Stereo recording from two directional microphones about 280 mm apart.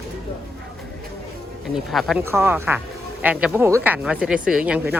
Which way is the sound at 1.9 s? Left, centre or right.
Centre.